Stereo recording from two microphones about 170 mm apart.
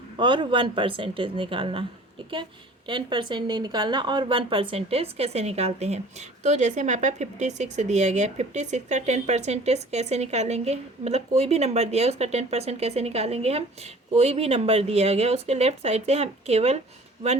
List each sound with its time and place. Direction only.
0.2 s a woman's voice: 30° right (ahead or behind)